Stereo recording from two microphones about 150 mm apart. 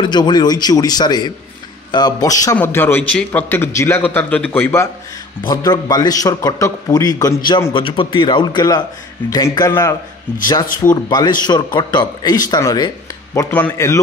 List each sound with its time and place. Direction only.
0.0 s a man's voice: 30° left (ahead or behind)
2.5 s a man's voice: 15° left (ahead or behind)
5.5 s a man's voice: 25° left (ahead or behind)
13.5 s a man's voice: 10° left (ahead or behind)